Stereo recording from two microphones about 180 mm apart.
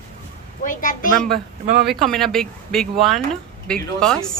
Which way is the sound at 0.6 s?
45° left (ahead or behind).